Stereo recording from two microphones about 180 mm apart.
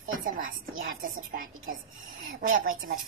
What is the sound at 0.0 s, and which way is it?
A woman's voice, 50° right (ahead or behind).